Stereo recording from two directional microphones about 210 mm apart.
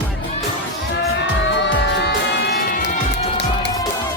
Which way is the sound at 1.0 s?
55° left (ahead or behind).